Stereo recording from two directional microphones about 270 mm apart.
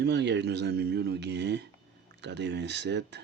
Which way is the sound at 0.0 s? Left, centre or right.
Right.